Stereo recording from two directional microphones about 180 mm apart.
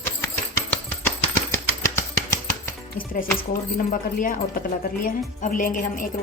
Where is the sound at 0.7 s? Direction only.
10° left (ahead or behind).